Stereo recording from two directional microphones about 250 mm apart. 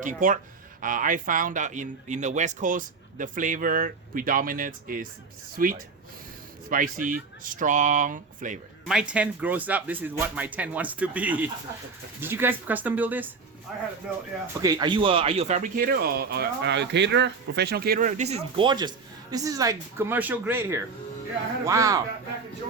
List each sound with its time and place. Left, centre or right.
0.0 s speech: right
8.9 s speech: centre
14.6 s speech: centre